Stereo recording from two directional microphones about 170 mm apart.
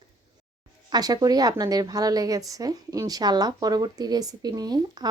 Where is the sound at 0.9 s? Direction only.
25° right (ahead or behind).